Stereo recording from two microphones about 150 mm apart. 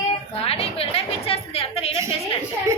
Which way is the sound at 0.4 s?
40° left (ahead or behind).